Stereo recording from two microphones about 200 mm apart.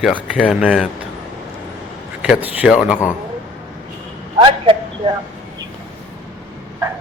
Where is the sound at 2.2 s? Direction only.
5° right (ahead or behind).